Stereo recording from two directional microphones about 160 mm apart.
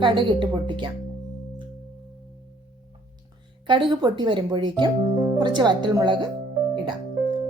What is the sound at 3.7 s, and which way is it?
Speech, 30° right (ahead or behind).